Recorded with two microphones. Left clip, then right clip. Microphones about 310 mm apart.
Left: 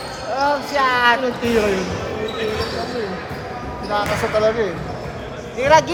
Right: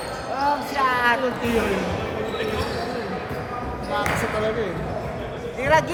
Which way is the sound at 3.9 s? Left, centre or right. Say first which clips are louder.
Left 5 dB; centre.